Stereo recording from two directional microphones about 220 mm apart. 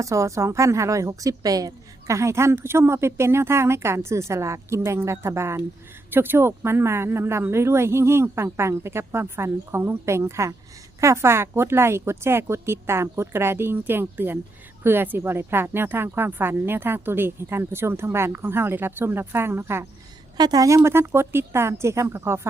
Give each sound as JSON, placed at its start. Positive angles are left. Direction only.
{"t": 0.0, "sound": "a woman's voice", "side_deg": -15}